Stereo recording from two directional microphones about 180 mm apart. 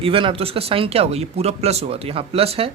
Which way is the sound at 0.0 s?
30° right (ahead or behind).